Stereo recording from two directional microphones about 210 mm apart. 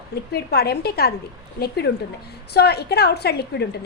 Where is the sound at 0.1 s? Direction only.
50° left (ahead or behind).